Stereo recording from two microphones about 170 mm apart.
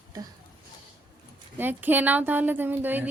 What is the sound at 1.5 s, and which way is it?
Speech, 10° right (ahead or behind).